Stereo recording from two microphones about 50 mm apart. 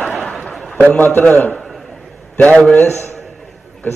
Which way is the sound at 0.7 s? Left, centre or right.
Left.